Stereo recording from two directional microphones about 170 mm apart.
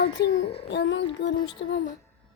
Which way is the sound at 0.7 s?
90° left.